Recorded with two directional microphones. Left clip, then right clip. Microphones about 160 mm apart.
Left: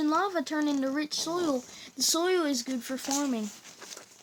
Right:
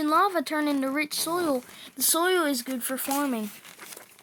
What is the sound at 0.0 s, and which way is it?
Speech, 35° right (ahead or behind).